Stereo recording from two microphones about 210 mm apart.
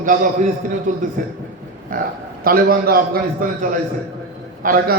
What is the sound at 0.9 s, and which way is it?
A man's voice, 40° right (ahead or behind).